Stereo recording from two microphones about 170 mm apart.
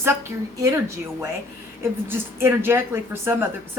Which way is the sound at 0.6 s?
15° right (ahead or behind).